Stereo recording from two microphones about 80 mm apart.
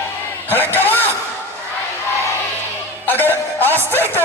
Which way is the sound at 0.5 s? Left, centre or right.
Left.